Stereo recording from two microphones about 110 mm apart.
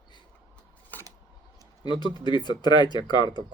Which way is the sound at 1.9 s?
40° left (ahead or behind).